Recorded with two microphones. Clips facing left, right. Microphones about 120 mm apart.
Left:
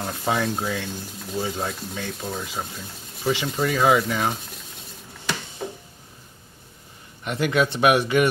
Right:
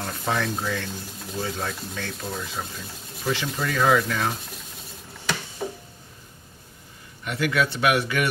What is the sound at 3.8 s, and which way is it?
Speech, 10° left (ahead or behind).